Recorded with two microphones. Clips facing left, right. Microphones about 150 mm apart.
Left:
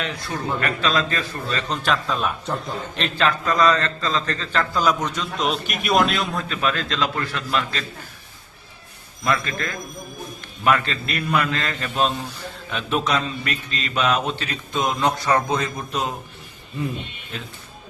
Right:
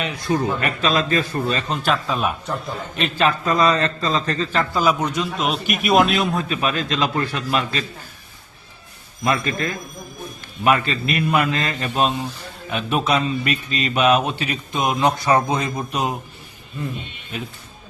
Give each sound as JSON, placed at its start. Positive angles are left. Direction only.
{"t": 0.0, "sound": "a man's voice", "side_deg": -15}
{"t": 1.7, "sound": "a man's voice", "side_deg": -5}
{"t": 6.3, "sound": "a man's voice", "side_deg": -15}
{"t": 9.2, "sound": "a man's voice", "side_deg": -20}
{"t": 17.3, "sound": "a man's voice", "side_deg": -10}